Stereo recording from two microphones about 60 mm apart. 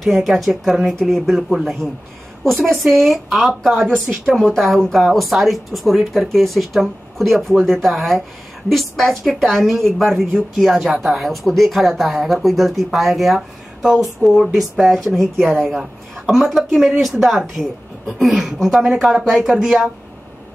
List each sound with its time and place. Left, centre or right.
0.0 s speech: centre
4.1 s speech: centre